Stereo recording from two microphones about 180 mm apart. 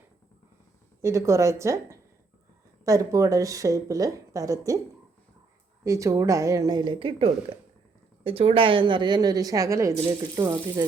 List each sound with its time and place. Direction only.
1.0 s a woman's voice: 15° right (ahead or behind)
5.8 s speech: 15° right (ahead or behind)